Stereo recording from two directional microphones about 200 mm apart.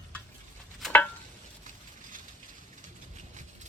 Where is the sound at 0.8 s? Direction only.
5° left (ahead or behind).